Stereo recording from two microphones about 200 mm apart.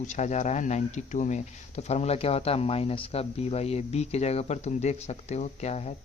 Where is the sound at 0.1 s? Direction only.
35° left (ahead or behind).